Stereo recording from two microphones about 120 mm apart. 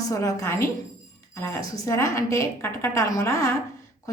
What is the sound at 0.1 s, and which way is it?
Speech, 25° left (ahead or behind).